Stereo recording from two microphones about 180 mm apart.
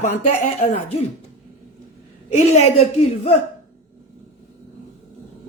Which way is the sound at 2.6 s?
35° left (ahead or behind).